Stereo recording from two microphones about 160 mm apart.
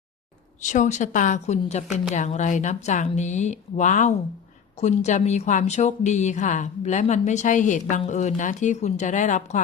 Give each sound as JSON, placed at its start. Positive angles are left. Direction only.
{"t": 0.6, "sound": "a woman's voice", "side_deg": 50}